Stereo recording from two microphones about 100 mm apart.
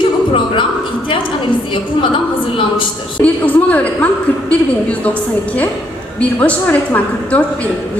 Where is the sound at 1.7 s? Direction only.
55° left (ahead or behind).